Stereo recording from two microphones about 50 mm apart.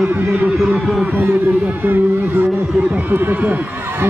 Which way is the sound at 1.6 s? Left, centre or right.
Right.